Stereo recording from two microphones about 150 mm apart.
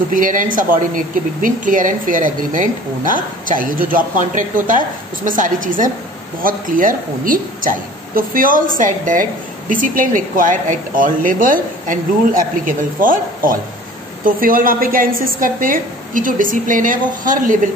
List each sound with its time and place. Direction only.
0.1 s a woman's voice: 60° right (ahead or behind)